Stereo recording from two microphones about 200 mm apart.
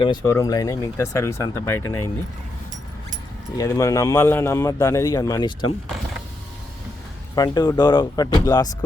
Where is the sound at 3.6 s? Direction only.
15° left (ahead or behind).